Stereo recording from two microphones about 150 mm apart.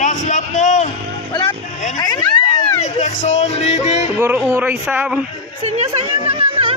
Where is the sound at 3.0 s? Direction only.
50° left (ahead or behind).